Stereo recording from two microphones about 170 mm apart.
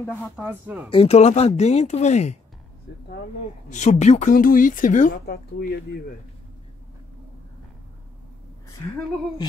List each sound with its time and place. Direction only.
0.0 s speech: 5° left (ahead or behind)
0.4 s speech: 10° right (ahead or behind)
0.8 s speech: 35° left (ahead or behind)
2.9 s speech: 75° left (ahead or behind)
3.7 s a woman's voice: 45° left (ahead or behind)
5.2 s speech: 70° left (ahead or behind)